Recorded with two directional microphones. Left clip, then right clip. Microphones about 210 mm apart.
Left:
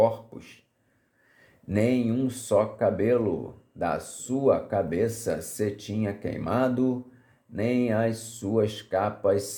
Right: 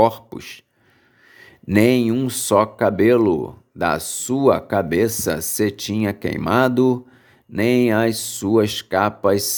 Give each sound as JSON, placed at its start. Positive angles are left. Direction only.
{"t": 0.0, "sound": "speech", "side_deg": -40}
{"t": 1.6, "sound": "speech", "side_deg": -40}